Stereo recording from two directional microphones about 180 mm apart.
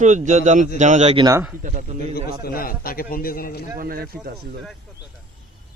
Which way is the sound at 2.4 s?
55° left (ahead or behind).